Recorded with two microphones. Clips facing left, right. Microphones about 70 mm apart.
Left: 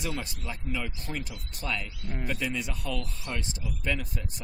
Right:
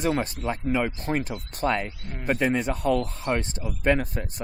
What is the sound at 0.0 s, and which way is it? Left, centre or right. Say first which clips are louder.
Speech: right 10 dB; right.